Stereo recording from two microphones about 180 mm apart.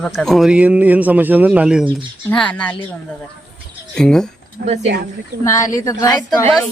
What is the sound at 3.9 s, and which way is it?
Speech, 5° left (ahead or behind).